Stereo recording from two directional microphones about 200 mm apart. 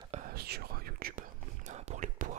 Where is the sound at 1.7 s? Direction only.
35° right (ahead or behind).